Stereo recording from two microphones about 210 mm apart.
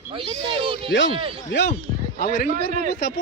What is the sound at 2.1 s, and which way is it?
Speech, 45° left (ahead or behind).